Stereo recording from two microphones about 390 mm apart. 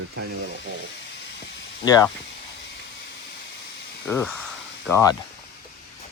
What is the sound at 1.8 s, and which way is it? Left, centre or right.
Speech, centre.